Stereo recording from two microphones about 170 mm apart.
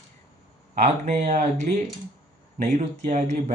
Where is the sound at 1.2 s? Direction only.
45° right (ahead or behind).